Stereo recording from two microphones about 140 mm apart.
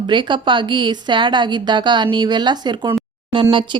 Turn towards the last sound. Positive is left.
turn(degrees=-35)  # may be behind; listen again after turning